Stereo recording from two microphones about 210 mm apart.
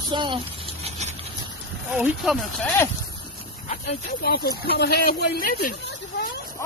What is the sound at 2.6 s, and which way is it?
Speech, 10° left (ahead or behind).